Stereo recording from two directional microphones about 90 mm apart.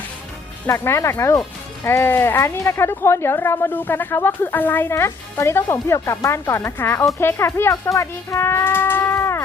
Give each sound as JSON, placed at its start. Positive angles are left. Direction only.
{"t": 0.7, "sound": "speech", "side_deg": 35}